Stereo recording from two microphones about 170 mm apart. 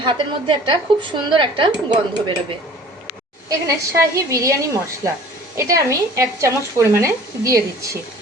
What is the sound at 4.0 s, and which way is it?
Speech, 15° right (ahead or behind).